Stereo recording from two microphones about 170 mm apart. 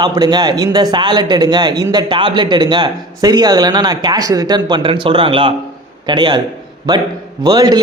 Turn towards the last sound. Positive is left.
turn(degrees=-25)  # may be behind; listen again after turning